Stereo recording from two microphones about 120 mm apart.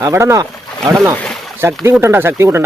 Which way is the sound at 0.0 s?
25° right (ahead or behind).